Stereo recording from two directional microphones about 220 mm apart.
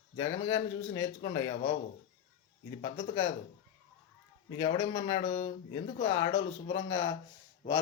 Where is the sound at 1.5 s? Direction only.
35° left (ahead or behind).